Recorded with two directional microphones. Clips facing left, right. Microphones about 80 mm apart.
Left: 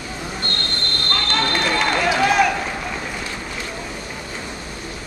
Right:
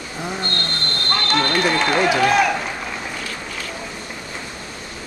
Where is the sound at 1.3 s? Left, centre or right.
Centre.